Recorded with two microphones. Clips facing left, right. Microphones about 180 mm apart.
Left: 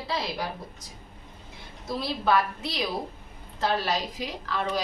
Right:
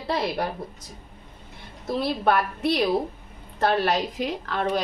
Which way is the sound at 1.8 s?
60° right (ahead or behind).